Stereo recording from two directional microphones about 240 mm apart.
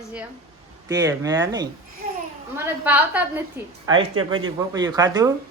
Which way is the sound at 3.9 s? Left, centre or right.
Right.